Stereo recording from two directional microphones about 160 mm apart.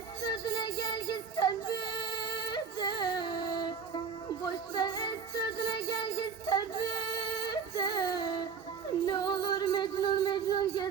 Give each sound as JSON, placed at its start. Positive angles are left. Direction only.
{"t": 0.2, "sound": "music", "side_deg": 25}